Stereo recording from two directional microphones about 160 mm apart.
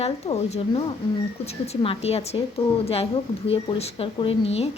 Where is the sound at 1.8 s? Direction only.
35° left (ahead or behind).